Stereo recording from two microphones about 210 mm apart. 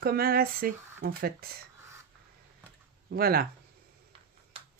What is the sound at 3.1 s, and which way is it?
Speech, 45° right (ahead or behind).